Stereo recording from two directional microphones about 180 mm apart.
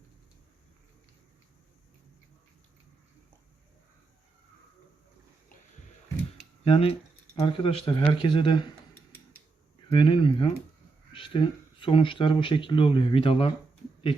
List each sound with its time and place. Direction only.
6.7 s speech: 35° left (ahead or behind)
9.9 s speech: 30° left (ahead or behind)